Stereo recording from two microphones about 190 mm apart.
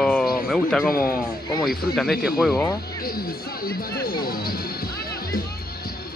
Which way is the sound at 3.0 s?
50° left (ahead or behind).